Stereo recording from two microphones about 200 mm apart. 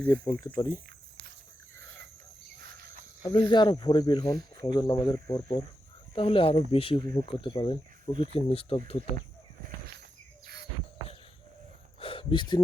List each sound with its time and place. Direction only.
0.0 s speech: 15° left (ahead or behind)
3.2 s speech: 20° left (ahead or behind)
10.4 s cricket: 55° right (ahead or behind)
11.9 s a sound: 25° left (ahead or behind)